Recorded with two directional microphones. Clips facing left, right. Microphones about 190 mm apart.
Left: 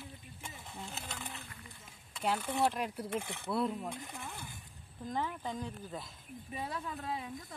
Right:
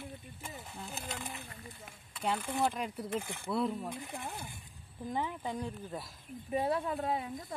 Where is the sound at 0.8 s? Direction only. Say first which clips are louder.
Right 3 dB; 10° right (ahead or behind).